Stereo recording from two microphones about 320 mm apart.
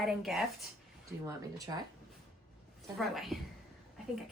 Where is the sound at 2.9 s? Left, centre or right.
Centre.